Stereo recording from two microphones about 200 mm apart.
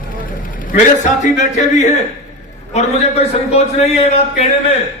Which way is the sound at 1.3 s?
35° left (ahead or behind).